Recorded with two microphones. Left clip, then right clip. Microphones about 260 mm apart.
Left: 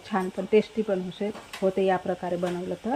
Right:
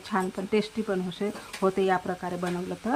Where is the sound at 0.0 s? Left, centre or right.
Centre.